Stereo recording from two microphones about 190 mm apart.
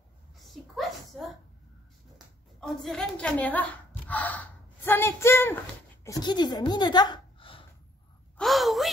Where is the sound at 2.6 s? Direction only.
Centre (ahead or behind); by 7.7 s 25° left (ahead or behind).